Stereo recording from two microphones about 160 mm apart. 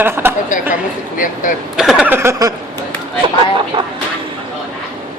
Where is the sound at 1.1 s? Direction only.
55° left (ahead or behind).